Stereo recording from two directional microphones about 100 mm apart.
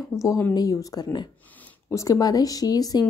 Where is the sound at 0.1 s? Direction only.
30° left (ahead or behind).